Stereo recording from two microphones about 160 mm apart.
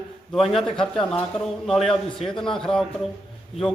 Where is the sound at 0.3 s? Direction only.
Centre (ahead or behind).